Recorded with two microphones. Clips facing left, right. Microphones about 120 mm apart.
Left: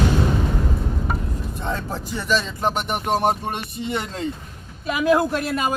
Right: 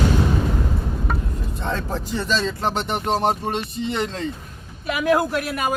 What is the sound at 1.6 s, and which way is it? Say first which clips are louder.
Speech: right 2 dB; 10° left (ahead or behind).